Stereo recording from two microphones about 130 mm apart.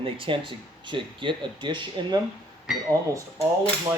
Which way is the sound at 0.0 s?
40° right (ahead or behind).